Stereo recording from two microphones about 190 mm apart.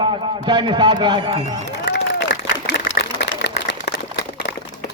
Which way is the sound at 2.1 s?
60° left (ahead or behind).